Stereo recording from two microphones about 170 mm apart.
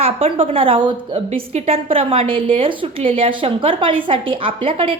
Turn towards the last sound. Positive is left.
turn(degrees=-30)  # may be behind; listen again after turning